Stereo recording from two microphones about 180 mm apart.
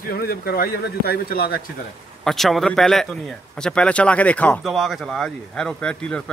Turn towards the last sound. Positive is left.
turn(degrees=5)  # may be behind; listen again after turning